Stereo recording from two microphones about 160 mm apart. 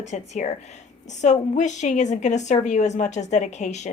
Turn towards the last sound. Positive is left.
turn(degrees=45)  # may be behind; listen again after turning